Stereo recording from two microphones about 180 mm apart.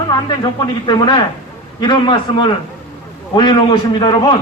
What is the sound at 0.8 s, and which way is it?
A man's voice, 25° left (ahead or behind).